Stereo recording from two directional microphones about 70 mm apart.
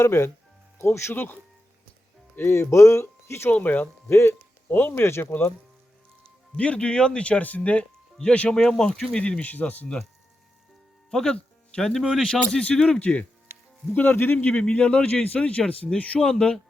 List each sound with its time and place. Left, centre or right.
0.0 s speech: left
3.5 s speech: left
4.1 s speech: left
6.6 s speech: centre
11.1 s speech: centre
13.9 s speech: left
14.5 s speech: centre